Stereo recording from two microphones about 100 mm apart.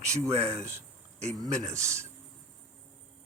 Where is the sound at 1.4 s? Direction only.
30° right (ahead or behind).